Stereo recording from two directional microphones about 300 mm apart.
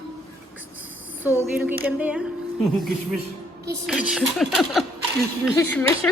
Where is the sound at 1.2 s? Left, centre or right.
Centre.